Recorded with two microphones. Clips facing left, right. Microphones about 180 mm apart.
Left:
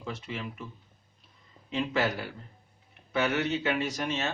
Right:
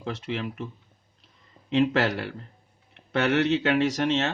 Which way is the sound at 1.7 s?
70° right (ahead or behind).